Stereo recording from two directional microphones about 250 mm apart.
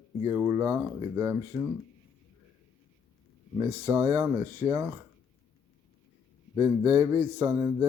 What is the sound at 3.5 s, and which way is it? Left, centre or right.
Speech, centre.